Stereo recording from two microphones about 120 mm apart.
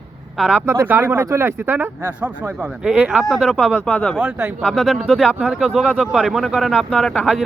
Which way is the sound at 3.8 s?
5° left (ahead or behind).